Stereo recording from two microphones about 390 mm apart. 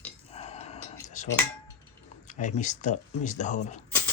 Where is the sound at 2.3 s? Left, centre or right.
Centre.